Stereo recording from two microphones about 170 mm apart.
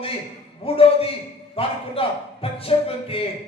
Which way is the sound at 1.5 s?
35° left (ahead or behind).